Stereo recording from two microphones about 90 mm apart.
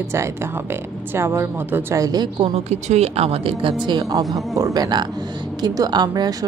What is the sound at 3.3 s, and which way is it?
Speech, 80° right.